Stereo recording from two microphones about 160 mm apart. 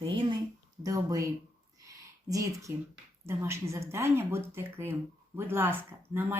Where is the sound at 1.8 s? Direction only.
20° right (ahead or behind).